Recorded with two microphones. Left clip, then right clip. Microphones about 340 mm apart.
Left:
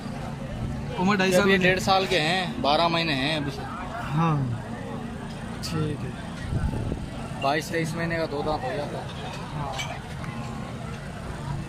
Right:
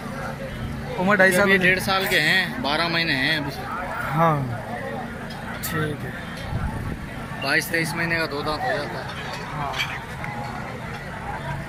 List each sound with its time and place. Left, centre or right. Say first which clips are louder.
1.0 s speech: right 5 dB; centre
1.5 s speech: right 2 dB; left
7.4 s speech: right 3 dB; left